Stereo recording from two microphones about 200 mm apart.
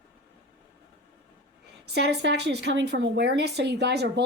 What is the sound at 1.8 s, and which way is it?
A woman's voice, 55° right (ahead or behind).